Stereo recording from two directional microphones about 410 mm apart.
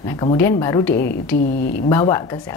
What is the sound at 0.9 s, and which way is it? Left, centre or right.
Speech, left.